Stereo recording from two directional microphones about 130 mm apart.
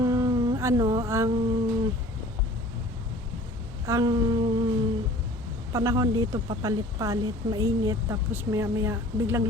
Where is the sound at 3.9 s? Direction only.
30° right (ahead or behind).